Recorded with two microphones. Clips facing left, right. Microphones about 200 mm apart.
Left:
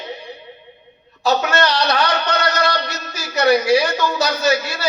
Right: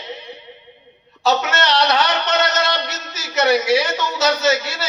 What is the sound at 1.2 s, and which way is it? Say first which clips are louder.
A man's voice: left 1 dB; 20° right (ahead or behind).